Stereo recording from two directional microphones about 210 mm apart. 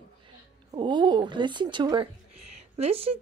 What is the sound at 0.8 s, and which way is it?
Speech, 20° right (ahead or behind).